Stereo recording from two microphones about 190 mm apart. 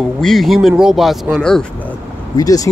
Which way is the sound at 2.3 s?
20° left (ahead or behind).